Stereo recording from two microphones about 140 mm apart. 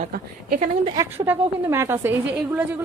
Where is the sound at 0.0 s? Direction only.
75° right (ahead or behind).